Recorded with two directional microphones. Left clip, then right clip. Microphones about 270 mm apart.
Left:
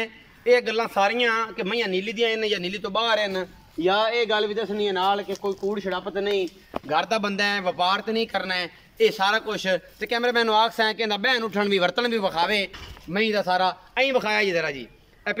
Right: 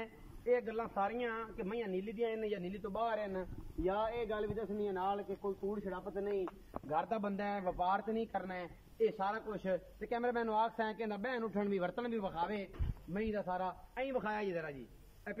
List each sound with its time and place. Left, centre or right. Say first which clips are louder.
0.0 s a man's voice: left 15 dB; left
4.9 s a man's voice: left 15 dB; left